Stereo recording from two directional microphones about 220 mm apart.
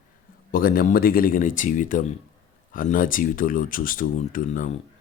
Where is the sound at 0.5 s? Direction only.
40° left (ahead or behind).